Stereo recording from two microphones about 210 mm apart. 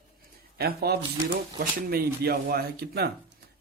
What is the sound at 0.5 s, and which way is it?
Speech, 50° right (ahead or behind).